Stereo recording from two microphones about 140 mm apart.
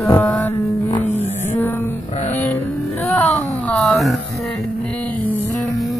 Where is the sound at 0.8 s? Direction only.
35° left (ahead or behind).